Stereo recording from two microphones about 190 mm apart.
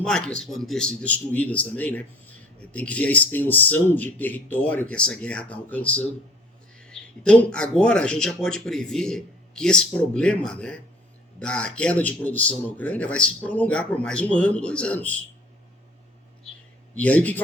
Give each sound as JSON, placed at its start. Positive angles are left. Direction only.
{"t": 0.0, "sound": "a man's voice", "side_deg": 5}
{"t": 17.0, "sound": "a man's voice", "side_deg": 10}